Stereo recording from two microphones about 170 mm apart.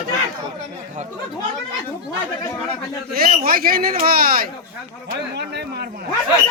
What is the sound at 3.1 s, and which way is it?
A man's voice, 60° right (ahead or behind).